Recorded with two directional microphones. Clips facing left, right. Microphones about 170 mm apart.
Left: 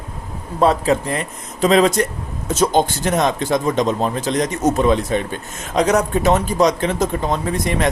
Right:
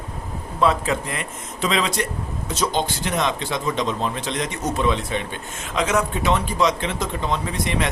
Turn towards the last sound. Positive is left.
turn(degrees=45)  # may be behind; listen again after turning